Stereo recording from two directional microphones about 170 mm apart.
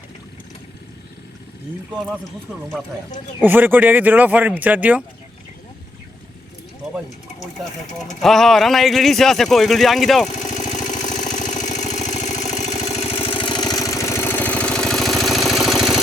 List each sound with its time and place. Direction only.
3.4 s speech: 10° right (ahead or behind)
8.2 s speech: centre (ahead or behind)
10.2 s vehicle: 45° left (ahead or behind); by 16.0 s centre (ahead or behind)